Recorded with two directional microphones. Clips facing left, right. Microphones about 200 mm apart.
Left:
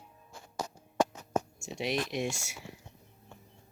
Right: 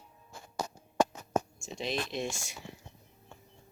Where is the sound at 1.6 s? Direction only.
15° left (ahead or behind).